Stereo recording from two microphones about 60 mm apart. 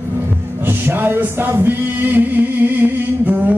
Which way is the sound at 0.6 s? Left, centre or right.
Right.